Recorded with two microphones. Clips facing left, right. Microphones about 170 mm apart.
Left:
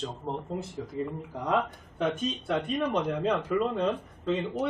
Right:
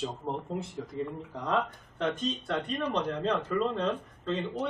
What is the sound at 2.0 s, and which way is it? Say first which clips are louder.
Speech: left 2 dB; 10° left (ahead or behind).